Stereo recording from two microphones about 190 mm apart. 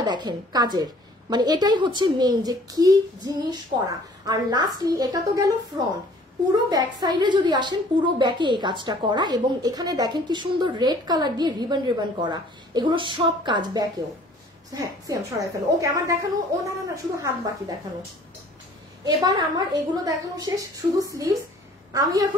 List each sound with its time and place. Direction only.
0.0 s a woman's voice: 20° right (ahead or behind)
4.3 s a woman's voice: 20° right (ahead or behind)
19.0 s a woman's voice: 20° right (ahead or behind)